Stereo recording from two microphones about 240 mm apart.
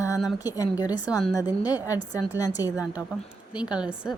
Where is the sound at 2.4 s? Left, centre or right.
Centre.